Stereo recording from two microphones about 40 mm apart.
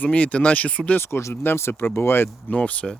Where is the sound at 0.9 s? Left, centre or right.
Left.